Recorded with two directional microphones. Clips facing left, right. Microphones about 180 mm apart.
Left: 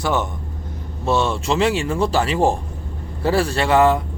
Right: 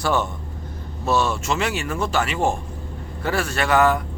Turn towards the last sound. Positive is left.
turn(degrees=30)  # may be behind; listen again after turning